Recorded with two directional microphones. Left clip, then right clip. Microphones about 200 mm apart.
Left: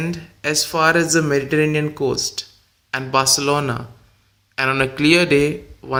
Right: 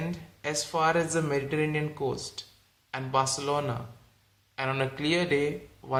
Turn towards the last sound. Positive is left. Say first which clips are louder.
# left 8 dB
turn(degrees=25)  # may be behind; listen again after turning